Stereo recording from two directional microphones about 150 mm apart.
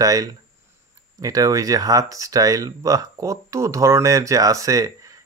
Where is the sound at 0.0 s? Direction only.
25° right (ahead or behind).